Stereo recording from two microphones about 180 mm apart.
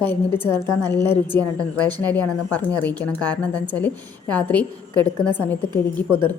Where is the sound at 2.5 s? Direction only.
10° left (ahead or behind).